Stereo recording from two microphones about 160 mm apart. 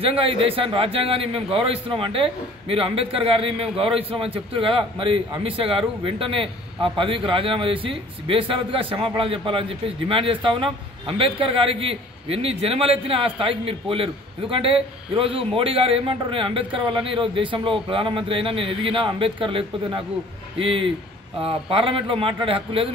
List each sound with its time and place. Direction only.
0.0 s a man's voice: 35° right (ahead or behind)